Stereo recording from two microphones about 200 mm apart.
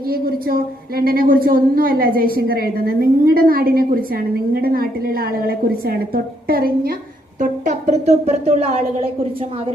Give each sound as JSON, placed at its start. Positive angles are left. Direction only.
{"t": 0.1, "sound": "a woman's voice", "side_deg": -45}